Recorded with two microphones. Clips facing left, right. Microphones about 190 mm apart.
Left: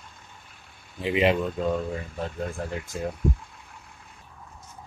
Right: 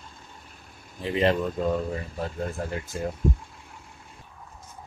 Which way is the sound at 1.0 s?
10° left (ahead or behind).